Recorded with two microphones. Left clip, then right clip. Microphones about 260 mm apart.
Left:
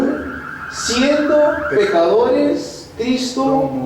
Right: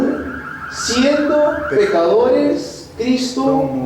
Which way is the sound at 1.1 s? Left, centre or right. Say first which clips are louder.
Left 3 dB; centre.